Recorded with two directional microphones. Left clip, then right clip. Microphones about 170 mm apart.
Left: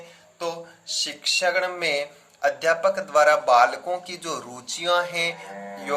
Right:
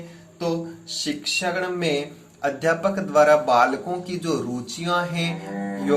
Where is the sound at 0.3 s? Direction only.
25° left (ahead or behind).